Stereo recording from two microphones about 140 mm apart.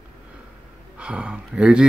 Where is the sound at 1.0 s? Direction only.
5° right (ahead or behind).